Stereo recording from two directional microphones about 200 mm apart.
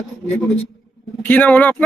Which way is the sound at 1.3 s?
10° left (ahead or behind).